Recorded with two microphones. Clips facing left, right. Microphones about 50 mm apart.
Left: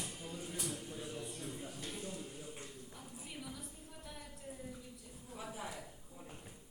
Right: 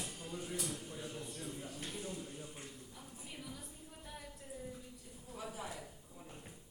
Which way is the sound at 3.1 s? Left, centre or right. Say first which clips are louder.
Left 1 dB; centre.